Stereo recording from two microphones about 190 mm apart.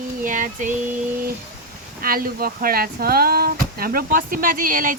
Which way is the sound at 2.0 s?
50° right (ahead or behind).